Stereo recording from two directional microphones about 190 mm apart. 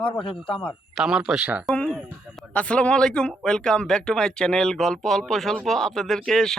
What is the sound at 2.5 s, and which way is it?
Speech, 5° left (ahead or behind).